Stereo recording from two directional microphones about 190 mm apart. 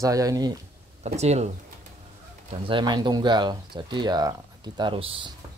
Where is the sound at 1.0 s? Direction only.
35° right (ahead or behind).